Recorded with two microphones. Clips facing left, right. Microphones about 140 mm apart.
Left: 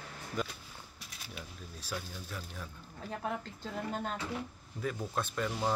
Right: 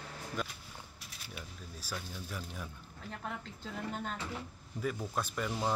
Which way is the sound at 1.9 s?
10° right (ahead or behind).